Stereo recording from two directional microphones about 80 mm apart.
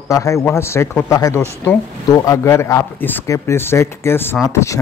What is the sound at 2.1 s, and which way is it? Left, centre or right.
Speech, left.